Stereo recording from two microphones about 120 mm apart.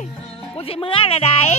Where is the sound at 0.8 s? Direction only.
50° left (ahead or behind).